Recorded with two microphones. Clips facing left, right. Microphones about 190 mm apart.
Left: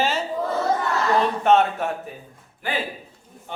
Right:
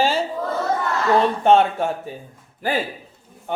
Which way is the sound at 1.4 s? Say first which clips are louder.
Right 2 dB; 30° right (ahead or behind).